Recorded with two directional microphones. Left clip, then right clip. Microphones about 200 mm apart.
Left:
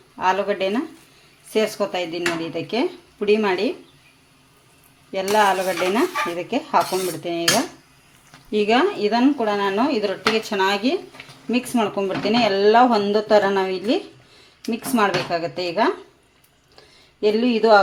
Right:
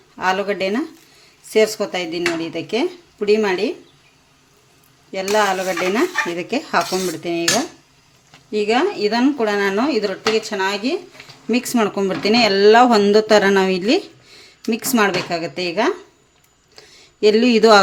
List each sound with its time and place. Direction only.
0.2 s speech: 15° right (ahead or behind)
5.1 s speech: 10° right (ahead or behind)
8.4 s speech: centre (ahead or behind); by 10.2 s 15° right (ahead or behind)
10.2 s speech: centre (ahead or behind)
11.5 s speech: 25° right (ahead or behind)
16.7 s a sound: 30° right (ahead or behind)